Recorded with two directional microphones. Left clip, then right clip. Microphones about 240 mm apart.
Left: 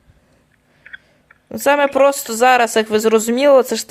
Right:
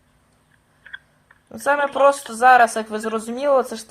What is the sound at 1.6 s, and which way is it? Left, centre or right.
Speech, left.